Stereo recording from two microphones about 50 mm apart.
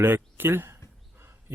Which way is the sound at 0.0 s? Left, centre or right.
Right.